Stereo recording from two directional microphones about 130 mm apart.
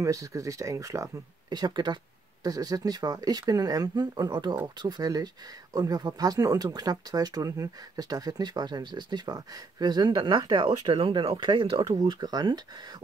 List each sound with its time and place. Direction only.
0.0 s speech: 25° right (ahead or behind); by 11.8 s 40° right (ahead or behind)
11.8 s speech: 30° right (ahead or behind)